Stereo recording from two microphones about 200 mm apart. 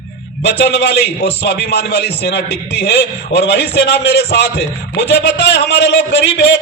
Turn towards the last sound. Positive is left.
turn(degrees=60)  # may be behind; listen again after turning